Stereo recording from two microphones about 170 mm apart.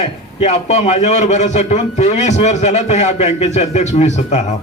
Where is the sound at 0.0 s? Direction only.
40° left (ahead or behind).